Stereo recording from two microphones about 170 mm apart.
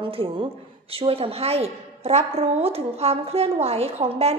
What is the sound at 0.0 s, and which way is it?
A woman's voice, 30° right (ahead or behind).